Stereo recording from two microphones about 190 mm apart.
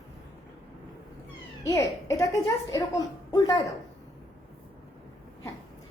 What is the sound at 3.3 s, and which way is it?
Speech, 20° left (ahead or behind).